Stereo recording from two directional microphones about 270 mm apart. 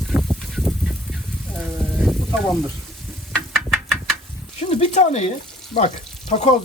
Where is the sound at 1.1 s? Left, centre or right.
Centre.